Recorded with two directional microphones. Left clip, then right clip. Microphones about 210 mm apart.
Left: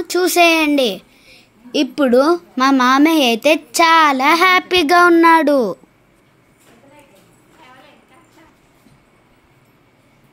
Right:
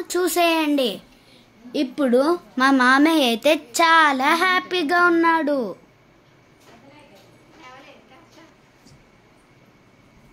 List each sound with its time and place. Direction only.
0.0 s a child's voice: 30° left (ahead or behind)
2.5 s a woman's voice: 15° left (ahead or behind)